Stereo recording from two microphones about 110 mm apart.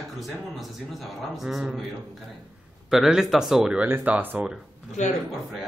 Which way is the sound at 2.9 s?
5° right (ahead or behind).